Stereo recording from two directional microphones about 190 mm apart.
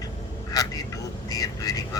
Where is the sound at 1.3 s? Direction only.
20° left (ahead or behind).